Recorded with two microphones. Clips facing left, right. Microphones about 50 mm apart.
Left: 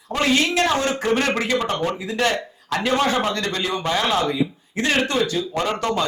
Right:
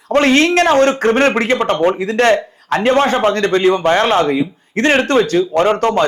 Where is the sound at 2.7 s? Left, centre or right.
Right.